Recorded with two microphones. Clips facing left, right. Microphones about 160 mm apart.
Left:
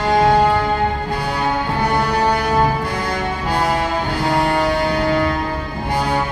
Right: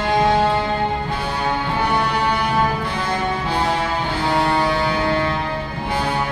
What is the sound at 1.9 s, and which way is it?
Music, 40° left (ahead or behind).